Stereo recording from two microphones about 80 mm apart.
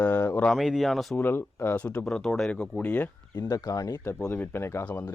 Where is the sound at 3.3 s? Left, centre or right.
Left.